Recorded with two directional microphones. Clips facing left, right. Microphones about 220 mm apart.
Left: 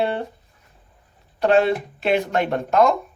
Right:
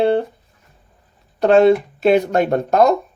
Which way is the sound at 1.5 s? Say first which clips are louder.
Right 6 dB; 45° right (ahead or behind).